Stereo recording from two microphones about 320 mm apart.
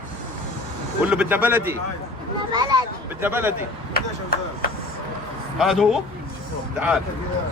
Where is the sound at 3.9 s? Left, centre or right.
Left.